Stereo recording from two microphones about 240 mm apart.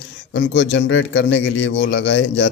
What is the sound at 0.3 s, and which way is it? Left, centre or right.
A man's voice, left.